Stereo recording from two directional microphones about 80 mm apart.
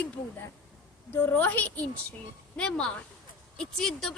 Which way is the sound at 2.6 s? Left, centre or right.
Centre.